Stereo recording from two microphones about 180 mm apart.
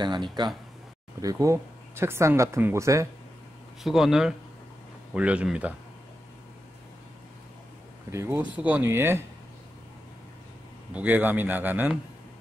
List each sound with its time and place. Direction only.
0.0 s speech: 25° right (ahead or behind)
3.8 s speech: centre (ahead or behind)
8.1 s speech: 15° right (ahead or behind)
11.0 s speech: 10° right (ahead or behind)